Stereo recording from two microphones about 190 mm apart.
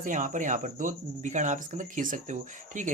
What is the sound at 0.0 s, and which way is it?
Speech, 40° right (ahead or behind).